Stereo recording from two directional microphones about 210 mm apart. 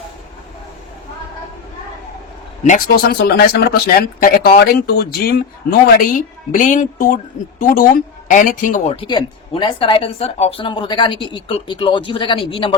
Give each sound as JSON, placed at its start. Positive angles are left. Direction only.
{"t": 2.6, "sound": "a woman's voice", "side_deg": 45}
{"t": 9.0, "sound": "speech", "side_deg": 25}